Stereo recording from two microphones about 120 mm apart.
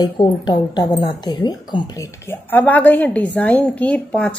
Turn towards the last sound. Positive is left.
turn(degrees=10)  # may be behind; listen again after turning